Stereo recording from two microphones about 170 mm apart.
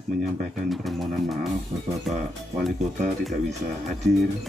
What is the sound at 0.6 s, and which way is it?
Speech, centre (ahead or behind).